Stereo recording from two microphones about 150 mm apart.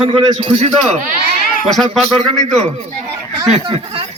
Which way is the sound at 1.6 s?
Centre (ahead or behind).